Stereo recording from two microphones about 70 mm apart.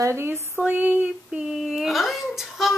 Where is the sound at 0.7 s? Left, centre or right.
Right.